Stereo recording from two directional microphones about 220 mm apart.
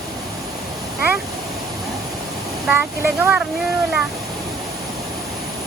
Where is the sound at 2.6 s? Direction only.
5° right (ahead or behind).